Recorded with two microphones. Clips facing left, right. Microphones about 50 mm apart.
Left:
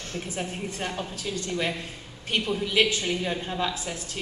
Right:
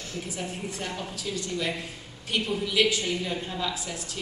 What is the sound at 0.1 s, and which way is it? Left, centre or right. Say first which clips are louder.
A woman's voice: left 2 dB; left.